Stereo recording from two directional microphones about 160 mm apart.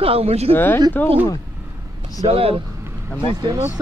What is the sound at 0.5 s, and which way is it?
Speech, 15° left (ahead or behind).